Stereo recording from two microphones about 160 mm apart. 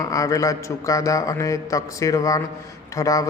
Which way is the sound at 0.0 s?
20° left (ahead or behind).